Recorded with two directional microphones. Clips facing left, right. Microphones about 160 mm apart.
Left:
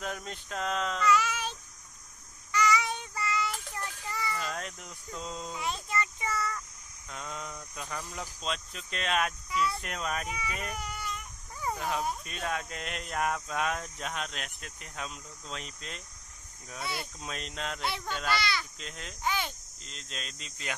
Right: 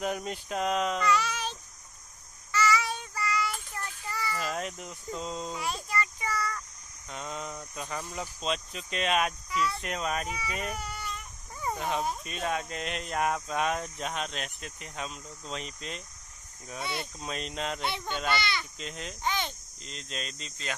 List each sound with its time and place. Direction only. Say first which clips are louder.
0.0 s speech: right 6 dB; 10° right (ahead or behind)
1.0 s child singing: left 1 dB; 10° left (ahead or behind)
2.5 s child singing: even; 20° left (ahead or behind)
4.4 s speech: right 4 dB; 5° right (ahead or behind)
5.6 s child singing: left 2 dB; 20° left (ahead or behind)
7.7 s a child's voice: right 2 dB; 10° right (ahead or behind)
10.8 s baby cry: even; 15° left (ahead or behind)
11.6 s a child's voice: right 1 dB; centre (ahead or behind)